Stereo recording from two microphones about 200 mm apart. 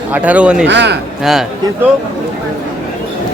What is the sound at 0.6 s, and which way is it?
Speech, 60° right (ahead or behind).